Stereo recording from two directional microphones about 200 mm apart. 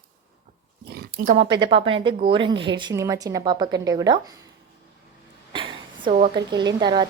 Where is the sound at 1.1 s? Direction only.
35° right (ahead or behind).